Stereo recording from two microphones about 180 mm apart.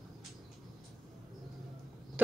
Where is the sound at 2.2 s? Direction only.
10° right (ahead or behind).